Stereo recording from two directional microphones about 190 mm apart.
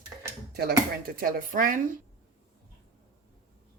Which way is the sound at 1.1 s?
50° right (ahead or behind).